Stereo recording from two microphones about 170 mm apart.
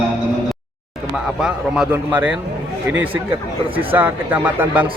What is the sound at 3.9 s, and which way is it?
Speech, 10° right (ahead or behind).